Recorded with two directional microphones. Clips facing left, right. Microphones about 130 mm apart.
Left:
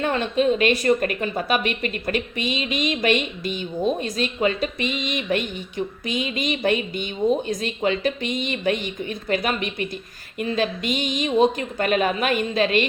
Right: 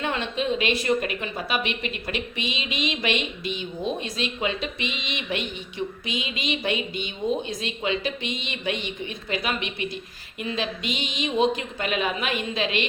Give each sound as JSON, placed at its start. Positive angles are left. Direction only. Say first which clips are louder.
{"t": 0.0, "sound": "a woman's voice", "louder": "left 6 dB", "side_deg": 45}